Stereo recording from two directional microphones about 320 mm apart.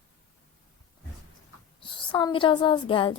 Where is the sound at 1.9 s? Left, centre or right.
Centre.